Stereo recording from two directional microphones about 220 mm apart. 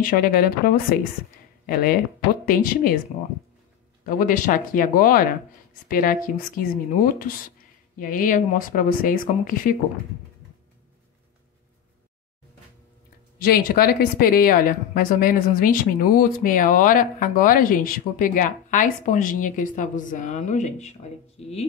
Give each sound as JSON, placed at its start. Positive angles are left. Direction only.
{"t": 0.0, "sound": "speech", "side_deg": 40}
{"t": 4.0, "sound": "speech", "side_deg": 40}
{"t": 13.4, "sound": "speech", "side_deg": 40}